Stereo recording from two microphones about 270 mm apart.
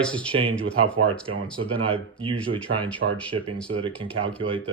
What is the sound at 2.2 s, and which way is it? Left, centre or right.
Speech, centre.